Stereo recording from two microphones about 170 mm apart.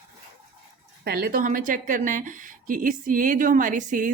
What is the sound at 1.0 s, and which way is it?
Speech, 65° right (ahead or behind).